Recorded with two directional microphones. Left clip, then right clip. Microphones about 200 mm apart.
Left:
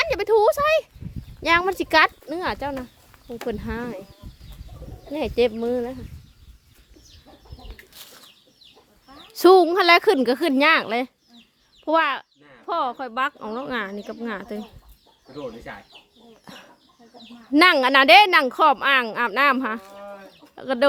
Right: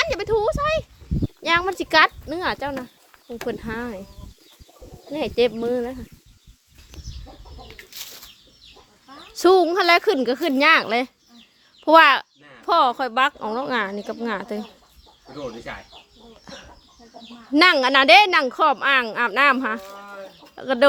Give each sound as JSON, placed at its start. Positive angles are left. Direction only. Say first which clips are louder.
{"t": 0.0, "sound": "a sound", "louder": "left 3 dB", "side_deg": 15}
{"t": 1.4, "sound": "speech", "louder": "left 1 dB", "side_deg": 15}
{"t": 5.1, "sound": "speech", "louder": "right 1 dB", "side_deg": 5}
{"t": 9.3, "sound": "a woman's voice", "louder": "left 2 dB", "side_deg": 15}
{"t": 11.9, "sound": "a child's voice", "louder": "right 8 dB", "side_deg": -10}
{"t": 15.7, "sound": "speech", "louder": "right 3 dB", "side_deg": 5}
{"t": 16.5, "sound": "chicken", "louder": "right 3 dB", "side_deg": 5}
{"t": 17.5, "sound": "a woman's voice", "louder": "even", "side_deg": 5}